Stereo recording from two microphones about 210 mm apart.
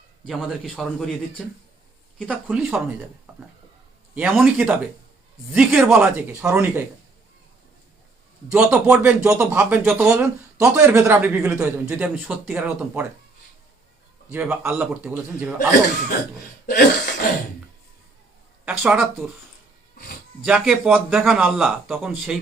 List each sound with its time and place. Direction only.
0.3 s speech: centre (ahead or behind)
2.1 s speech: 5° right (ahead or behind)
4.1 s a man's voice: 5° right (ahead or behind)
8.5 s a man's voice: 5° right (ahead or behind)
14.3 s a man's voice: 10° right (ahead or behind)
16.6 s cough: 45° left (ahead or behind)
18.6 s speech: 5° right (ahead or behind)
20.4 s speech: 5° right (ahead or behind)